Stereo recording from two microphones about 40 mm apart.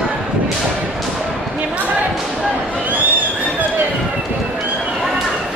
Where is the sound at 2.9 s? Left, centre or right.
Right.